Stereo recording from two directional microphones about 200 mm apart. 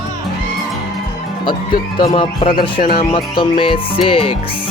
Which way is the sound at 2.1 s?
30° left (ahead or behind).